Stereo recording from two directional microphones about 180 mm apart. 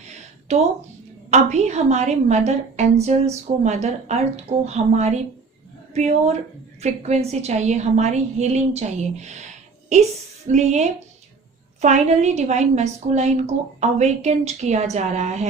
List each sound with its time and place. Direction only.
0.5 s a woman's voice: 40° right (ahead or behind)